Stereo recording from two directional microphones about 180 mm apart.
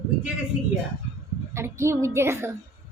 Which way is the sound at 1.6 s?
15° right (ahead or behind).